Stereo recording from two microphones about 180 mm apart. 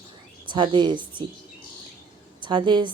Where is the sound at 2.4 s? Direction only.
25° right (ahead or behind).